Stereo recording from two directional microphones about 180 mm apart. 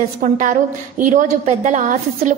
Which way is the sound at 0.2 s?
45° right (ahead or behind).